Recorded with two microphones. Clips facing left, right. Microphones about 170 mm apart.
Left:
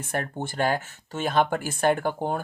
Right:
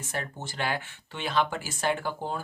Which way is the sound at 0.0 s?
55° left (ahead or behind).